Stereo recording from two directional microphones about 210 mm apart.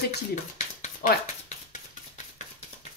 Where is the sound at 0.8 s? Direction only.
35° left (ahead or behind).